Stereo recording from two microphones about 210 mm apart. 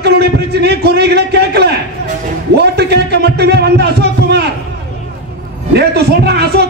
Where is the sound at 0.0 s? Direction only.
50° right (ahead or behind).